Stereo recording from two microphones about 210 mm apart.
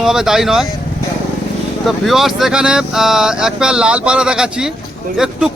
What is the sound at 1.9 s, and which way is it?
Speech, centre (ahead or behind).